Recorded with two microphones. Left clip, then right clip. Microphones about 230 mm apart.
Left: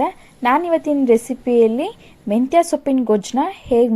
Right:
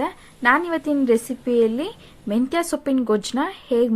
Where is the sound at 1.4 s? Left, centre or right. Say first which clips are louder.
Left 5 dB; right.